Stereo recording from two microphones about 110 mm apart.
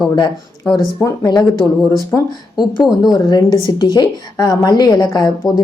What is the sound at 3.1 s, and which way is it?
A woman's voice, 40° left (ahead or behind).